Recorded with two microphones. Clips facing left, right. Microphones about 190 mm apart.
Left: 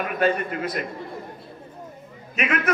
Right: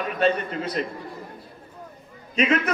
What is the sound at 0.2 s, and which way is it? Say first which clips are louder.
Speech: even; 30° right (ahead or behind).